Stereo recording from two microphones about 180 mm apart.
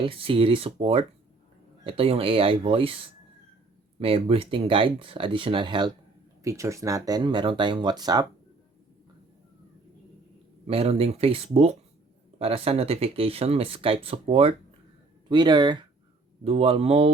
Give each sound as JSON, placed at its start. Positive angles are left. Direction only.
{"t": 0.0, "sound": "speech", "side_deg": -30}
{"t": 4.0, "sound": "speech", "side_deg": -30}
{"t": 10.7, "sound": "speech", "side_deg": -30}